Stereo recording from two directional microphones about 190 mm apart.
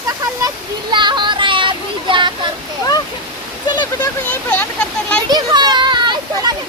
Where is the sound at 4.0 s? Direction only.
10° left (ahead or behind).